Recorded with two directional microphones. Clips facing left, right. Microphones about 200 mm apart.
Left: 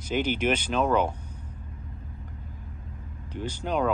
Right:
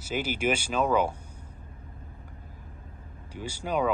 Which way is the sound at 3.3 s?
10° right (ahead or behind).